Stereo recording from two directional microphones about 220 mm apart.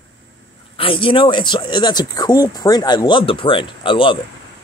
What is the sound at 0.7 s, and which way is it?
Speech, 25° left (ahead or behind).